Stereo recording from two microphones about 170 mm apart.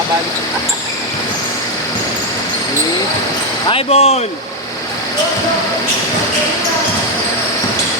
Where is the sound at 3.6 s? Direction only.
35° left (ahead or behind).